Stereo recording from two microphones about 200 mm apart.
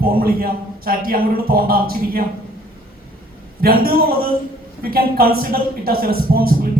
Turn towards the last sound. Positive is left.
turn(degrees=-50)  # may be behind; listen again after turning